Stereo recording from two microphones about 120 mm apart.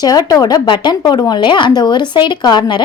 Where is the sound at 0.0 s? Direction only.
35° left (ahead or behind).